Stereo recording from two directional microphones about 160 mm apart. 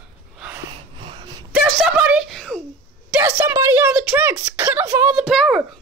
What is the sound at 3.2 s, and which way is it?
Speech, 15° right (ahead or behind).